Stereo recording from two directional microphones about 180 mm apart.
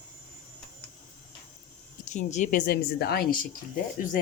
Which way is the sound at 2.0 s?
40° left (ahead or behind).